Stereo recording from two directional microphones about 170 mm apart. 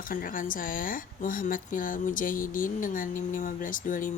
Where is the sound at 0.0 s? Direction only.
55° left (ahead or behind).